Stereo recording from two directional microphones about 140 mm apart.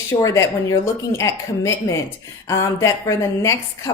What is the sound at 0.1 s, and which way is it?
A woman's voice, 20° left (ahead or behind).